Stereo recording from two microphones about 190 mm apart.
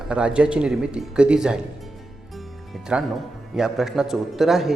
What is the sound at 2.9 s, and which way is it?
Speech, 5° right (ahead or behind).